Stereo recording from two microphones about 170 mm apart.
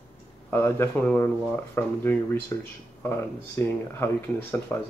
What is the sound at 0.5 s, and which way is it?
Speech, 15° left (ahead or behind).